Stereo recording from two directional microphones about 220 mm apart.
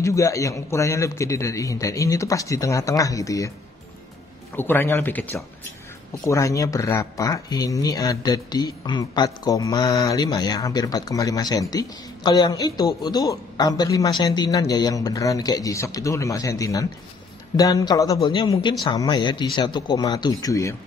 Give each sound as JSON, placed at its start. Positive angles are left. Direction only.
{"t": 0.0, "sound": "speech", "side_deg": 15}
{"t": 4.6, "sound": "speech", "side_deg": 10}